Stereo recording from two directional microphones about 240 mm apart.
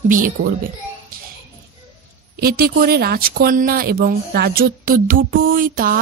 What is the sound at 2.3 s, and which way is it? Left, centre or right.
Speech, right.